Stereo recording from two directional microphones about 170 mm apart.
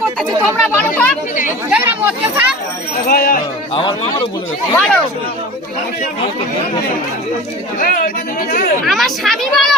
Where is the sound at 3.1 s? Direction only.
60° left (ahead or behind).